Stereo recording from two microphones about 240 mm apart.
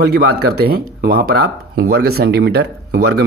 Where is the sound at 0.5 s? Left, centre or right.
Right.